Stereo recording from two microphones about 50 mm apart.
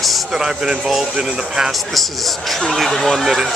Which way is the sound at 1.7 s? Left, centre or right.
Centre.